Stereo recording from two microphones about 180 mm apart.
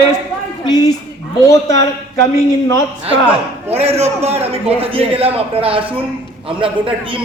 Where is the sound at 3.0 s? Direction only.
35° right (ahead or behind).